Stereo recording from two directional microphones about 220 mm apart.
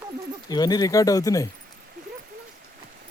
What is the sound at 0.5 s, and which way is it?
Speech, 20° left (ahead or behind).